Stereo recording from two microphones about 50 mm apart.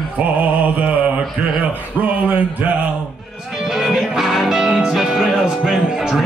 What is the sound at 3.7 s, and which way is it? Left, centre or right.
Music, centre.